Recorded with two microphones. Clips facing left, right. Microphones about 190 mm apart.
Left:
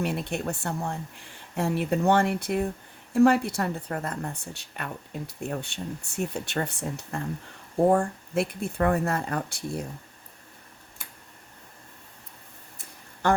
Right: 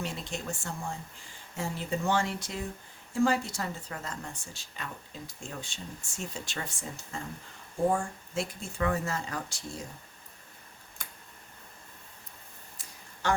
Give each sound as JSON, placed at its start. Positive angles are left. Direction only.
{"t": 0.0, "sound": "a woman's voice", "side_deg": 60}
{"t": 13.2, "sound": "speech", "side_deg": 55}